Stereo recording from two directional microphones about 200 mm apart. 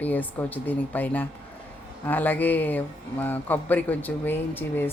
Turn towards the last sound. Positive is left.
turn(degrees=10)  # may be behind; listen again after turning